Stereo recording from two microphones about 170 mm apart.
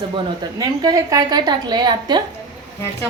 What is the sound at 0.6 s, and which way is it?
A woman's voice, 25° right (ahead or behind).